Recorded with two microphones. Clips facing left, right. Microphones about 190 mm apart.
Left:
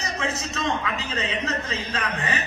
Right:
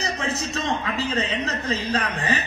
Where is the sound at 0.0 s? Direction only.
35° right (ahead or behind).